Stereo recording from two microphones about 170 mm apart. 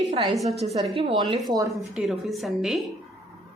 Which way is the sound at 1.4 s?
20° right (ahead or behind).